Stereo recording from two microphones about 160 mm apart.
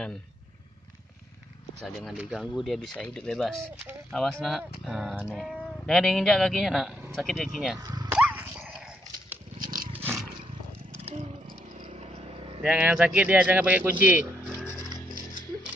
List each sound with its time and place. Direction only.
1.8 s speech: centre (ahead or behind)
7.8 s speech: 25° right (ahead or behind)
8.1 s dog: 10° right (ahead or behind)
9.6 s roaring cats: 60° right (ahead or behind)
11.9 s vehicle: 40° right (ahead or behind)
12.6 s speech: 5° right (ahead or behind)
14.8 s music: 25° right (ahead or behind)